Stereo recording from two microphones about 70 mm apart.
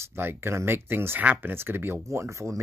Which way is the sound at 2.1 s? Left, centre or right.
Right.